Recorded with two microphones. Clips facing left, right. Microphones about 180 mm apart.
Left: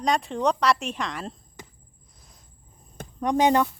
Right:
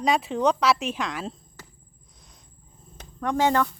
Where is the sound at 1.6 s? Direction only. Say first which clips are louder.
Left 3 dB; 15° left (ahead or behind).